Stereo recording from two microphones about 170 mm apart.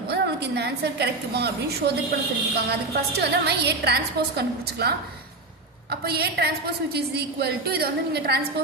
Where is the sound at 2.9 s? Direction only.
75° right (ahead or behind).